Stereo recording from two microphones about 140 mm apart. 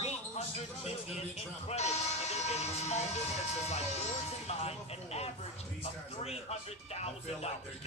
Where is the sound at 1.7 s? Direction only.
50° left (ahead or behind).